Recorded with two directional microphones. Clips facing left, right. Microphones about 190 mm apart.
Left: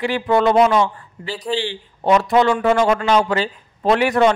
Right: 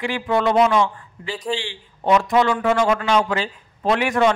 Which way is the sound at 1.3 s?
5° left (ahead or behind).